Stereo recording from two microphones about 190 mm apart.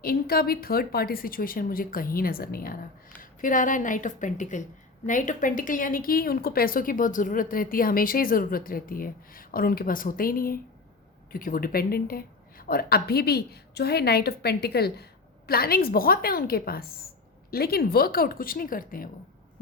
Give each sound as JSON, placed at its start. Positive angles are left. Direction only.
{"t": 0.0, "sound": "a woman's voice", "side_deg": 50}